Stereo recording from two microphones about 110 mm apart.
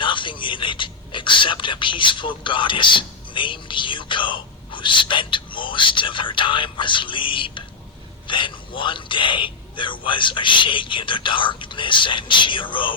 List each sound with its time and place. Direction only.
0.0 s speech: 50° left (ahead or behind)